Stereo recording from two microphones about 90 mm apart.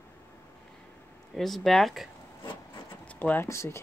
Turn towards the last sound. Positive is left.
turn(degrees=30)  # may be behind; listen again after turning